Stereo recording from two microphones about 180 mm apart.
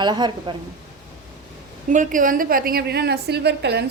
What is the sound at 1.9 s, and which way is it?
A woman's voice, 45° right (ahead or behind).